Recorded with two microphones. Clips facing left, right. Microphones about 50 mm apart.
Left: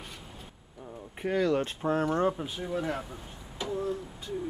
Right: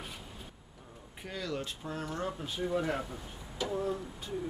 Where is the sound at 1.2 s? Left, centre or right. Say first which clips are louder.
Left 11 dB; left.